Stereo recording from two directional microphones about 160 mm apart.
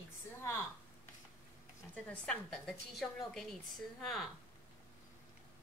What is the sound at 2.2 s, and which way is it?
A woman's voice, 5° left (ahead or behind).